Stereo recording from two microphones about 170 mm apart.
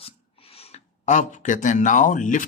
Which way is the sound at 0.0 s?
35° left (ahead or behind).